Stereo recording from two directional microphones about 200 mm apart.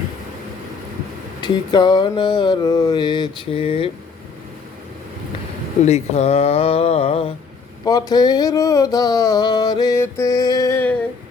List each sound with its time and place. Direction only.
1.4 s mantra: 20° left (ahead or behind)
5.8 s mantra: 35° left (ahead or behind)
7.9 s a sound: 20° left (ahead or behind)